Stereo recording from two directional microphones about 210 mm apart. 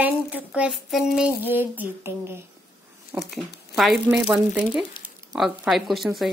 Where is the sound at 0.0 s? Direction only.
5° right (ahead or behind).